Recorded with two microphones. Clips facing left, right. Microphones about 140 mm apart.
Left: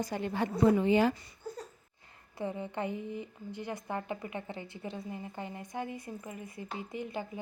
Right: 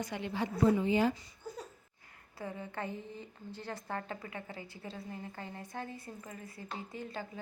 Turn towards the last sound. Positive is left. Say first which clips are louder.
# left 4 dB
turn(degrees=15)  # may be behind; listen again after turning